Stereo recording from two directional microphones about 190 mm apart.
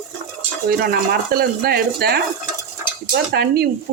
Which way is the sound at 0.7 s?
55° right (ahead or behind).